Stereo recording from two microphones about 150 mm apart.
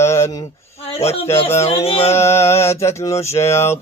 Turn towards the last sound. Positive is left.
turn(degrees=15)  # may be behind; listen again after turning